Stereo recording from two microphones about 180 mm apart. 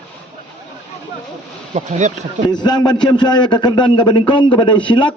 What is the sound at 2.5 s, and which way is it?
A man's voice, 25° left (ahead or behind).